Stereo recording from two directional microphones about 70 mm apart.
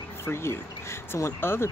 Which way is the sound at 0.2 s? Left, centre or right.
Left.